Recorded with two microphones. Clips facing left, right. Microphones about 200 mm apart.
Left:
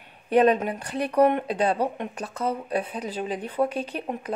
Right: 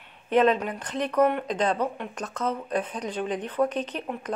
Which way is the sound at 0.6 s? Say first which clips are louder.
Left 2 dB; 10° left (ahead or behind).